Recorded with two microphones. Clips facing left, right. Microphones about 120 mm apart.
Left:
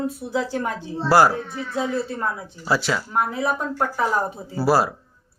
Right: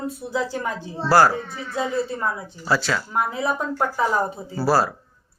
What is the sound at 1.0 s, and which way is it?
Speech, 15° left (ahead or behind).